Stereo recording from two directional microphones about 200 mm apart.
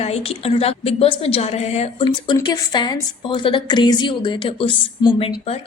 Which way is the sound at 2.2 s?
20° left (ahead or behind).